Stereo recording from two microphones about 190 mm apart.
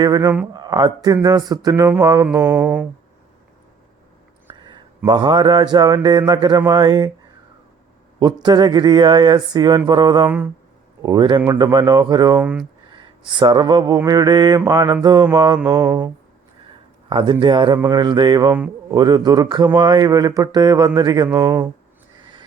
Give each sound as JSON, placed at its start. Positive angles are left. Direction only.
{"t": 0.0, "sound": "speech", "side_deg": -20}
{"t": 2.2, "sound": "mantra", "side_deg": -10}
{"t": 4.6, "sound": "a sound", "side_deg": -25}
{"t": 6.7, "sound": "speech", "side_deg": -20}
{"t": 8.2, "sound": "speech", "side_deg": -20}
{"t": 10.2, "sound": "mantra", "side_deg": -10}
{"t": 11.0, "sound": "speech", "side_deg": -20}
{"t": 12.4, "sound": "mantra", "side_deg": -5}
{"t": 12.9, "sound": "speech", "side_deg": -25}
{"t": 15.6, "sound": "mantra", "side_deg": -20}
{"t": 17.1, "sound": "a man's voice", "side_deg": -25}
{"t": 18.5, "sound": "a man's voice", "side_deg": -10}
{"t": 18.9, "sound": "speech", "side_deg": -20}